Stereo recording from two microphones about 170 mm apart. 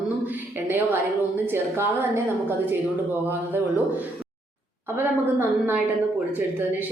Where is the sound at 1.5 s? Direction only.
15° right (ahead or behind).